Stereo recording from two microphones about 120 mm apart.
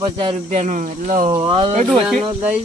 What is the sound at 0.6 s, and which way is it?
Speech, 90° right.